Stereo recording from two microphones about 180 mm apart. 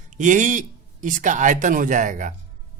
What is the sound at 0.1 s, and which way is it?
A man's voice, 45° right (ahead or behind).